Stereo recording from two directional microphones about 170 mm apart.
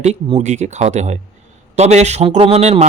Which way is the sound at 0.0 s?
40° right (ahead or behind).